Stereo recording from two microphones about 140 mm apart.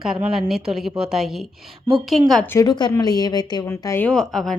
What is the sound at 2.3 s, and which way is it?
Speech, 10° left (ahead or behind).